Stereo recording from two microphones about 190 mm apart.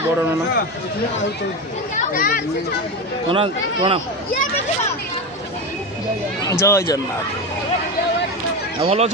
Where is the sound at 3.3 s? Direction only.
30° right (ahead or behind).